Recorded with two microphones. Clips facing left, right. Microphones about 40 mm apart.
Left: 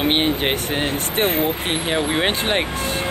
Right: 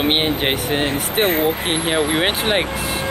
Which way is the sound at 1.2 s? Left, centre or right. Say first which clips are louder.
Right 2 dB; right.